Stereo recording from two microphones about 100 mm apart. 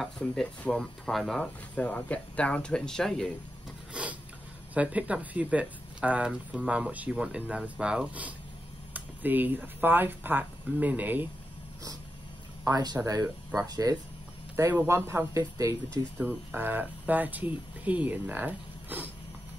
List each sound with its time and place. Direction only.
0.2 s speech: 10° left (ahead or behind)
1.8 s speech: 15° left (ahead or behind)
3.9 s a sound: 15° right (ahead or behind)
4.7 s speech: 15° right (ahead or behind)
12.6 s speech: 40° right (ahead or behind)
14.7 s speech: 20° right (ahead or behind)
16.2 s speech: 20° right (ahead or behind)